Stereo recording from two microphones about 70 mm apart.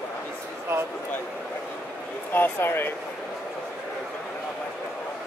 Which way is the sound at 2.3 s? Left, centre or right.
Left.